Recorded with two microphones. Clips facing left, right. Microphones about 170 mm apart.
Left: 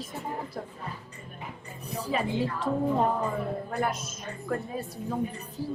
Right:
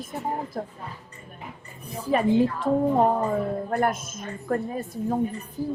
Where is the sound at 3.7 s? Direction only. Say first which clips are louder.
Right 5 dB; 50° right (ahead or behind).